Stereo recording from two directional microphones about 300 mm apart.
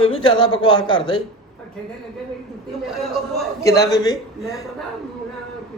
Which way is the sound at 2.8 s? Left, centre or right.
Centre.